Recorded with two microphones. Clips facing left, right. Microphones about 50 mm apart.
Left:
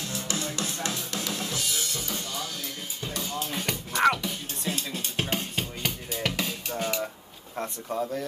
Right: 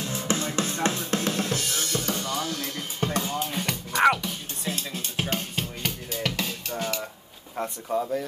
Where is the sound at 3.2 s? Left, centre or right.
Right.